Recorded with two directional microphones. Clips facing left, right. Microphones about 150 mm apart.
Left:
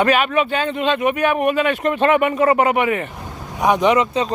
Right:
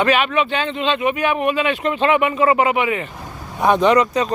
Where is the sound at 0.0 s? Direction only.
45° left (ahead or behind).